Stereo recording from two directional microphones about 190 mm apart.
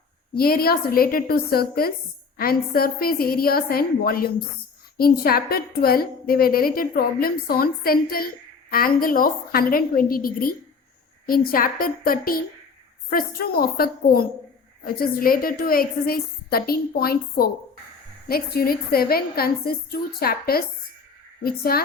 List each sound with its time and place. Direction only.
0.3 s a woman's voice: 50° left (ahead or behind)